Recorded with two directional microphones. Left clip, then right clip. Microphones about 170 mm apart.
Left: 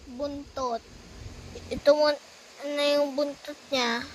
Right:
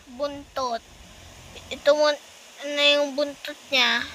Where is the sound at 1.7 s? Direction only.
25° left (ahead or behind).